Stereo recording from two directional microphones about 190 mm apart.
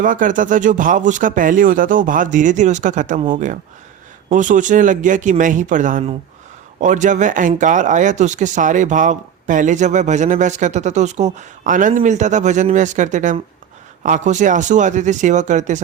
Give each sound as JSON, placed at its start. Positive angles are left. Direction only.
{"t": 0.0, "sound": "speech", "side_deg": -45}